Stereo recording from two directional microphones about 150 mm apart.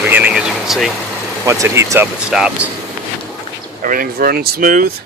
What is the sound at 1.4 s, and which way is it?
Speech, 20° right (ahead or behind).